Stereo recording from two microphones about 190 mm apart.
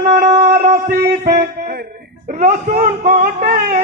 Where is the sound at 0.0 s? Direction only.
45° right (ahead or behind).